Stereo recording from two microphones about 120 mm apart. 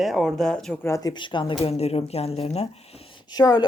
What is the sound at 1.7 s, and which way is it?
Speech, 55° left (ahead or behind).